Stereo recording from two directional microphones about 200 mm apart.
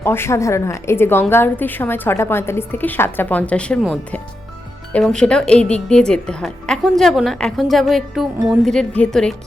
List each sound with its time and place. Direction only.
0.0 s a woman's voice: 10° left (ahead or behind)